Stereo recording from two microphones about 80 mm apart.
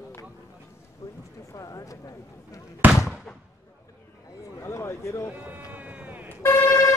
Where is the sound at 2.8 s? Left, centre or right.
Right.